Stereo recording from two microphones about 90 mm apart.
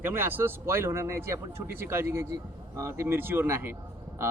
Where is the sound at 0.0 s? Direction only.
25° right (ahead or behind).